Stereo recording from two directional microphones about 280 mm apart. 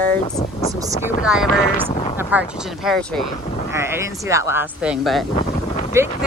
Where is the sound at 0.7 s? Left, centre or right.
Centre.